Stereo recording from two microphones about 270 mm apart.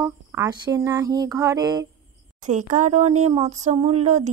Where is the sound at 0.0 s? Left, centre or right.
Centre.